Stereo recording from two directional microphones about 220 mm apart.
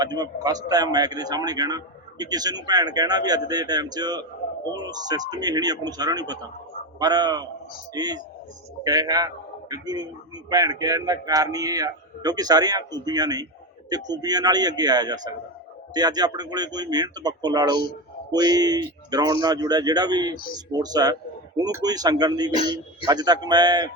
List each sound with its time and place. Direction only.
0.0 s a man's voice: 15° right (ahead or behind)